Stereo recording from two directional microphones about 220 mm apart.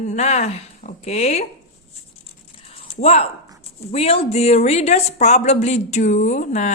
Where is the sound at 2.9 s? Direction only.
30° left (ahead or behind).